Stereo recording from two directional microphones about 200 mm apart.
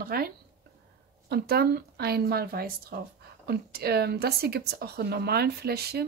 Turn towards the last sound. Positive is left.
turn(degrees=-50)  # may be behind; listen again after turning